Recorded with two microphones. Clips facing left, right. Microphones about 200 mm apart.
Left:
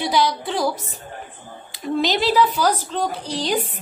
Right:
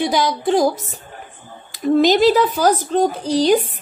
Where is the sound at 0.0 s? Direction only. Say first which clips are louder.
Right 3 dB; 45° right (ahead or behind).